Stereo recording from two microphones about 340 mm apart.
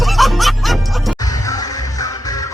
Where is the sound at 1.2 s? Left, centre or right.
Centre.